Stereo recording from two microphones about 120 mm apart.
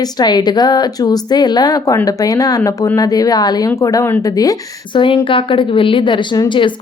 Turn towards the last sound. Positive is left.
turn(degrees=40)  # may be behind; listen again after turning